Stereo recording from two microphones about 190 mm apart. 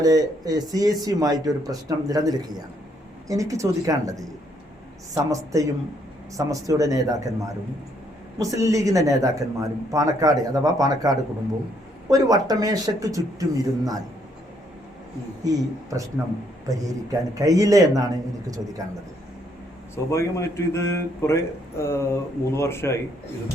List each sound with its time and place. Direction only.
0.0 s speech: 20° right (ahead or behind)
15.4 s speech: 20° right (ahead or behind)
20.1 s speech: 15° left (ahead or behind)